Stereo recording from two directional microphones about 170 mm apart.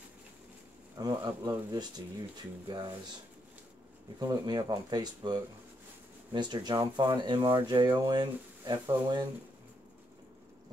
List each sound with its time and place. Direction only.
0.9 s speech: 20° right (ahead or behind)
4.2 s speech: 25° right (ahead or behind)